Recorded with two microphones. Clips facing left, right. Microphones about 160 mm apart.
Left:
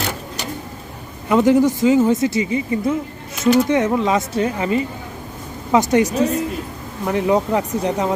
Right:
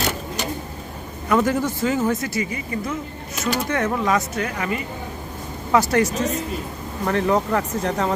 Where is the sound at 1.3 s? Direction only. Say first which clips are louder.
Left 6 dB; 20° left (ahead or behind).